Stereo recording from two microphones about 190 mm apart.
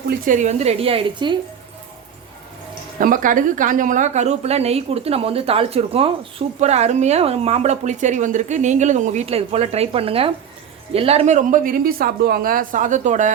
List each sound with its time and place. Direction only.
0.3 s a woman's voice: 40° right (ahead or behind)
3.0 s a woman's voice: 45° right (ahead or behind)